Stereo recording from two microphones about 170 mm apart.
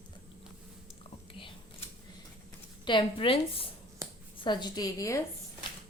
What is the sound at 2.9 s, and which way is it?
Speech, 30° left (ahead or behind).